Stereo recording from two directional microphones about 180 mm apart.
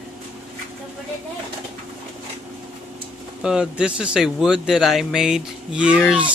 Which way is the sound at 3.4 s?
5° right (ahead or behind).